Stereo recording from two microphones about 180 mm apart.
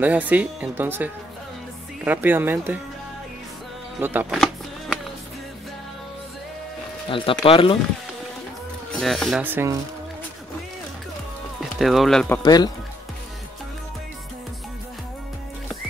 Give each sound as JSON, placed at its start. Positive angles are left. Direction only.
{"t": 0.0, "sound": "speech", "side_deg": -10}
{"t": 4.0, "sound": "speech", "side_deg": -10}
{"t": 4.3, "sound": "music", "side_deg": 0}
{"t": 7.1, "sound": "speech", "side_deg": 30}
{"t": 8.9, "sound": "speech", "side_deg": 0}
{"t": 9.5, "sound": "speech", "side_deg": -15}
{"t": 11.8, "sound": "speech", "side_deg": 0}
{"t": 12.4, "sound": "speech", "side_deg": 20}